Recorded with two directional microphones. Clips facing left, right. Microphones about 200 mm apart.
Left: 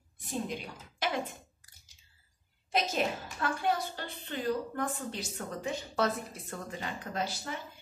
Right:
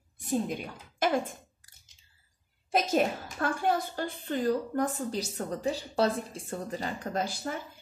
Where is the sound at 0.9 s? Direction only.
50° right (ahead or behind).